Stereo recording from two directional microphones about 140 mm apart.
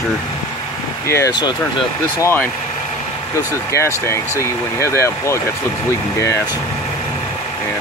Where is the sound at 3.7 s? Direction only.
20° left (ahead or behind).